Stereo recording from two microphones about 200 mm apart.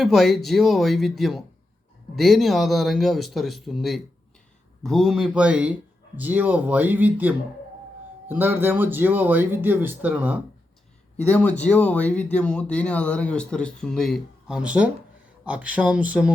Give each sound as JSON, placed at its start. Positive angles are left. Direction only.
{"t": 0.0, "sound": "speech", "side_deg": 0}
{"t": 11.2, "sound": "speech", "side_deg": 5}